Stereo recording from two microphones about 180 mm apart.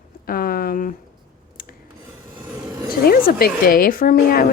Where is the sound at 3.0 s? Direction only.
55° left (ahead or behind).